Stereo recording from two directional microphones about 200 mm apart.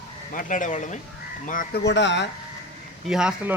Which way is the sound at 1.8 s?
60° left (ahead or behind).